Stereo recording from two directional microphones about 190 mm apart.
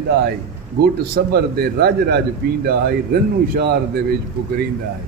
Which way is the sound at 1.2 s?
55° right (ahead or behind).